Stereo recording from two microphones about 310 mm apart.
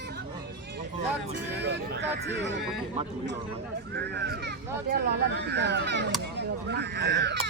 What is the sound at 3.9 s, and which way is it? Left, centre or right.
Speech, right.